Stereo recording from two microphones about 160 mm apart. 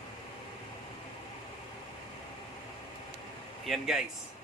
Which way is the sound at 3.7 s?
5° right (ahead or behind).